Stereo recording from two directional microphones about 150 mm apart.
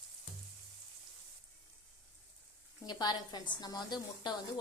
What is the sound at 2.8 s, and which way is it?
A woman's voice, 30° left (ahead or behind).